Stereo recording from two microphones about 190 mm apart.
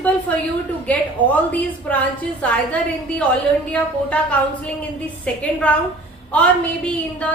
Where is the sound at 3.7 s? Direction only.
5° left (ahead or behind).